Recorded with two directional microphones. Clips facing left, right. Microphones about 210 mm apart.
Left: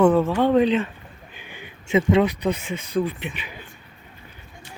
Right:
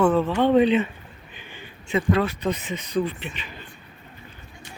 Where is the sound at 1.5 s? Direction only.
20° left (ahead or behind).